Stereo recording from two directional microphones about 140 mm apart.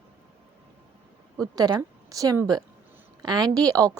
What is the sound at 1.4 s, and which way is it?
A woman's voice, 25° right (ahead or behind).